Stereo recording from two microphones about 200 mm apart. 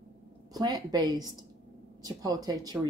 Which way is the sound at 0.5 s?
20° right (ahead or behind).